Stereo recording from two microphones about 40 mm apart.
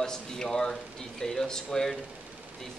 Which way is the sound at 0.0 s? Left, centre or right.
Centre.